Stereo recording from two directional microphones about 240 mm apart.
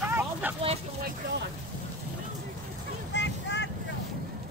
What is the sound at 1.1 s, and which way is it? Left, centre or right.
Speech, right.